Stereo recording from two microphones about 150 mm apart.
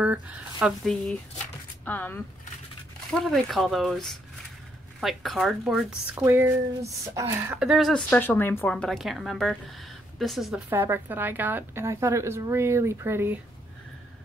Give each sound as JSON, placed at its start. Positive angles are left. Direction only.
{"t": 0.0, "sound": "speech", "side_deg": -10}
{"t": 1.9, "sound": "a woman's voice", "side_deg": 10}
{"t": 7.5, "sound": "speech", "side_deg": -5}
{"t": 10.7, "sound": "a woman's voice", "side_deg": -15}